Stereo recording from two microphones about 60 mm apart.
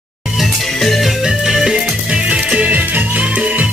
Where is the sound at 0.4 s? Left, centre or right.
Centre.